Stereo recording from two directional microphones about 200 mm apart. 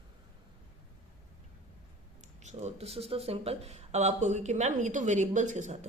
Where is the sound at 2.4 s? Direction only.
35° right (ahead or behind).